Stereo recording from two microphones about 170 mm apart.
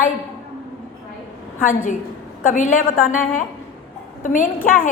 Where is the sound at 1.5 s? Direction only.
50° left (ahead or behind).